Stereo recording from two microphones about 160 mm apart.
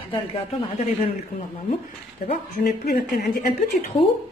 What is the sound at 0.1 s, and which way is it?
Speech, 35° left (ahead or behind).